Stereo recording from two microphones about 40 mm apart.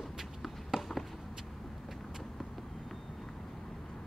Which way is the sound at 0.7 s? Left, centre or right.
Centre.